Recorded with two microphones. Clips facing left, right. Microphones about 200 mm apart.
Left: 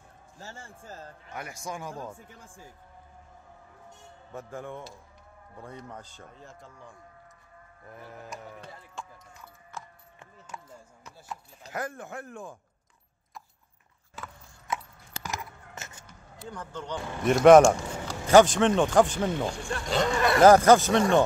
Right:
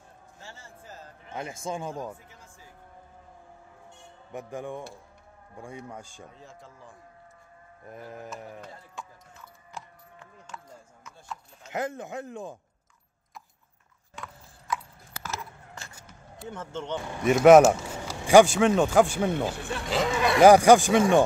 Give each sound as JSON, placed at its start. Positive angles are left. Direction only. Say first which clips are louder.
{"t": 0.4, "sound": "a man's voice", "louder": "left 3 dB", "side_deg": 45}
{"t": 1.2, "sound": "speech", "louder": "right 5 dB", "side_deg": -25}
{"t": 2.1, "sound": "a man's voice", "louder": "left 3 dB", "side_deg": 50}
{"t": 4.3, "sound": "speech", "louder": "right 3 dB", "side_deg": -15}
{"t": 6.2, "sound": "speech", "louder": "right 1 dB", "side_deg": 0}
{"t": 7.9, "sound": "speech", "louder": "right 4 dB", "side_deg": -20}
{"t": 11.7, "sound": "speech", "louder": "right 4 dB", "side_deg": -20}
{"t": 14.7, "sound": "horse", "louder": "right 1 dB", "side_deg": 25}
{"t": 15.2, "sound": "a sound", "louder": "even", "side_deg": 20}
{"t": 16.4, "sound": "speech", "louder": "right 3 dB", "side_deg": -25}
{"t": 17.2, "sound": "speech", "louder": "even", "side_deg": 0}
{"t": 20.4, "sound": "speech", "louder": "right 2 dB", "side_deg": -15}